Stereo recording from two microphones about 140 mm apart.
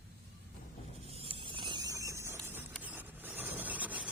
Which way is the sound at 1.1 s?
40° right (ahead or behind).